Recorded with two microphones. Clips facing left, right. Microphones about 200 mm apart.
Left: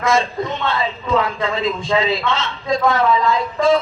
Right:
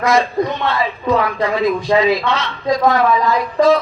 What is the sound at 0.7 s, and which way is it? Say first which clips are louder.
A man's voice: right 2 dB; 25° left (ahead or behind).